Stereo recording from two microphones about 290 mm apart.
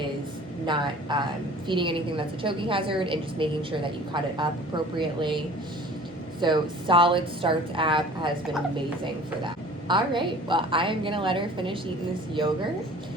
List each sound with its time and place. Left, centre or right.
0.6 s a woman's voice: centre
6.4 s a woman's voice: centre
9.9 s a woman's voice: centre